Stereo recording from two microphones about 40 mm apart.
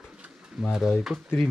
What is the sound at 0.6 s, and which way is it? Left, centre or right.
Speech, centre.